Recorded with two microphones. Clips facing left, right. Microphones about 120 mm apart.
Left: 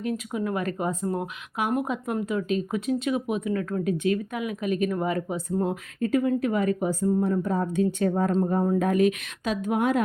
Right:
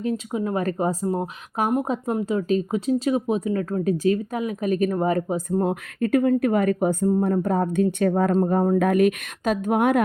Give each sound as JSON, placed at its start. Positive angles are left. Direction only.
{"t": 0.3, "sound": "speech", "side_deg": -30}
{"t": 1.0, "sound": "speech", "side_deg": -25}